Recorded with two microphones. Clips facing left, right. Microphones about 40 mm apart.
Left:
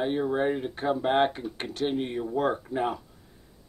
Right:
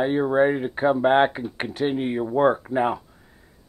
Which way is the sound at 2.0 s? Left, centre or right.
Right.